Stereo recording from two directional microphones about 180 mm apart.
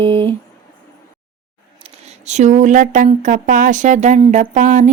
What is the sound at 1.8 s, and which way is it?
Speech, 35° right (ahead or behind).